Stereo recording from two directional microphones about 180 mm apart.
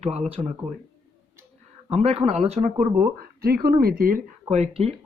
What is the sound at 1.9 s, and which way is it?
Speech, 35° right (ahead or behind).